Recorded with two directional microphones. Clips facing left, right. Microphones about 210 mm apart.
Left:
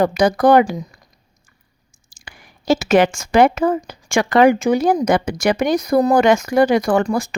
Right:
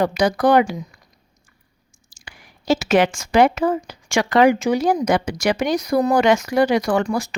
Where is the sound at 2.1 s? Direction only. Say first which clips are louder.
Left 2 dB; 50° left (ahead or behind).